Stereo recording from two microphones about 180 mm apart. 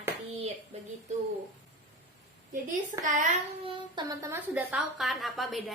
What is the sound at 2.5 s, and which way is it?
Speech, 45° right (ahead or behind).